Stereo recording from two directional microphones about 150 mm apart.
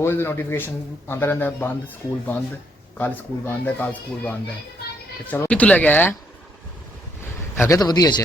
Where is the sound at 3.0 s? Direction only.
15° left (ahead or behind).